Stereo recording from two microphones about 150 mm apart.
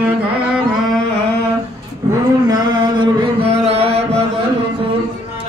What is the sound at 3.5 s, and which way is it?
Chant, 45° right (ahead or behind).